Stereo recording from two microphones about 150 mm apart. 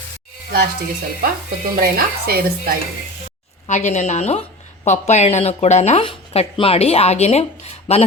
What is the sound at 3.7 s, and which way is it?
Speech, 50° left (ahead or behind).